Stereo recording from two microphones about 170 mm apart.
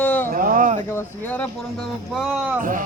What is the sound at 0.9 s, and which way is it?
Speech, 15° left (ahead or behind).